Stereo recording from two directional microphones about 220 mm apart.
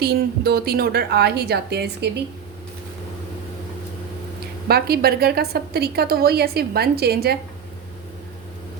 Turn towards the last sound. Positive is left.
turn(degrees=-45)  # may be behind; listen again after turning